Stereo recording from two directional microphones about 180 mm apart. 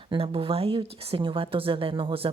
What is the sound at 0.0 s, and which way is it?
Speech, 30° right (ahead or behind).